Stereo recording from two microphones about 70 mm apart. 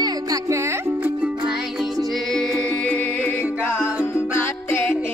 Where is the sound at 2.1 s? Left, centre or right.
Centre.